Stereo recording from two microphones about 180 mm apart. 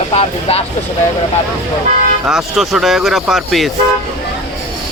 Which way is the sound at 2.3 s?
Centre (ahead or behind).